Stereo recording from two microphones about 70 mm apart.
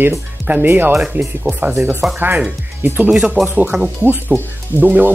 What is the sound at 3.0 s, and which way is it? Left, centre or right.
Speech, centre.